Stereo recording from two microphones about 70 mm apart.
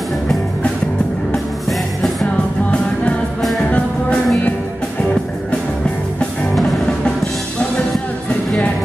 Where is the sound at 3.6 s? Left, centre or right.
Centre.